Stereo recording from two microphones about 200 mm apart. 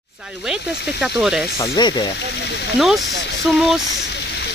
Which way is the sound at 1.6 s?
20° left (ahead or behind).